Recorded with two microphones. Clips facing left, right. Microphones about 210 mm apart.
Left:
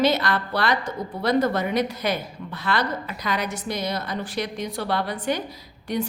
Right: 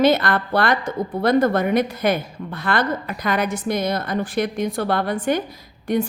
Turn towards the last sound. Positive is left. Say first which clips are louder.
# right 5 dB
turn(degrees=-50)  # may be behind; listen again after turning